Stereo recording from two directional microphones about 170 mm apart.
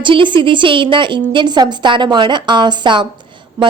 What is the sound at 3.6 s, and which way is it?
Speech, 15° right (ahead or behind).